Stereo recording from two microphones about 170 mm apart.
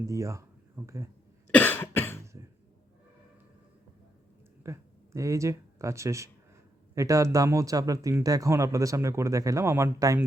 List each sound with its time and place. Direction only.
0.0 s speech: 20° right (ahead or behind)
1.5 s cough: 10° left (ahead or behind)
4.6 s speech: 20° right (ahead or behind)